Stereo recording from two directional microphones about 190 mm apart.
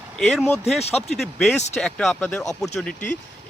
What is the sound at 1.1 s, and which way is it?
Speech, centre (ahead or behind).